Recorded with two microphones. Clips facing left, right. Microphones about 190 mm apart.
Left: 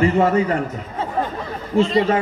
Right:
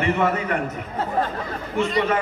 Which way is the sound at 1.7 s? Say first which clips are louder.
Left 5 dB; 30° left (ahead or behind).